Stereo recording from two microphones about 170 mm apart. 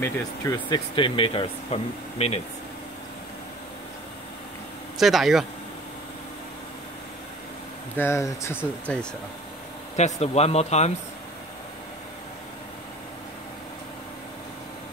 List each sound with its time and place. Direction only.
0.0 s speech: 20° left (ahead or behind); by 2.4 s 40° left (ahead or behind)
4.9 s speech: centre (ahead or behind)
7.9 s speech: 15° left (ahead or behind)
9.9 s speech: 40° left (ahead or behind)